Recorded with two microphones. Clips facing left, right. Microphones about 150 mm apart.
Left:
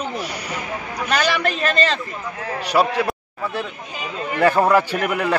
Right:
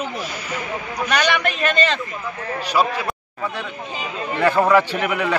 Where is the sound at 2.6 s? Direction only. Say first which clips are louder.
Left 2 dB; 75° left (ahead or behind).